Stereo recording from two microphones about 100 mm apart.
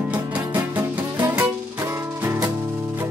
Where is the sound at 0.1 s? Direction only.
15° right (ahead or behind).